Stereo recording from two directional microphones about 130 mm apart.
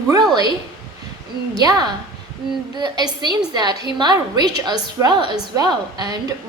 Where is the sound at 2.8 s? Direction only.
30° right (ahead or behind).